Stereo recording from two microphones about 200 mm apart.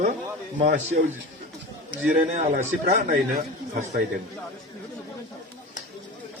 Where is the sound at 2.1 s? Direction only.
35° right (ahead or behind).